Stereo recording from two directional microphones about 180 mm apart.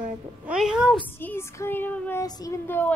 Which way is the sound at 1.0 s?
10° left (ahead or behind).